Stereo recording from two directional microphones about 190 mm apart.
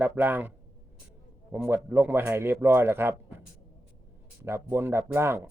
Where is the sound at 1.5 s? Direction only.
10° right (ahead or behind).